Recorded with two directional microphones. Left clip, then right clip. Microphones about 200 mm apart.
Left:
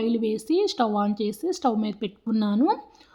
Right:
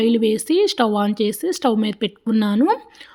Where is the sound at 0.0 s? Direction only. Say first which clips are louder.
Right 8 dB; 25° right (ahead or behind).